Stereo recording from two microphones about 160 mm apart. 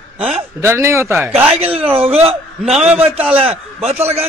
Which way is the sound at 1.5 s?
40° right (ahead or behind).